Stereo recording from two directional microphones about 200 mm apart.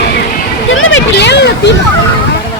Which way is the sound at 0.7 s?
75° left (ahead or behind).